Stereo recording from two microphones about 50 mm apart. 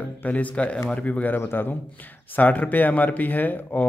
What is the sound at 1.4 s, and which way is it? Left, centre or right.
Speech, left.